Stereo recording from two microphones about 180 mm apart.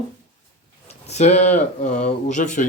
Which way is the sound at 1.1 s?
40° left (ahead or behind).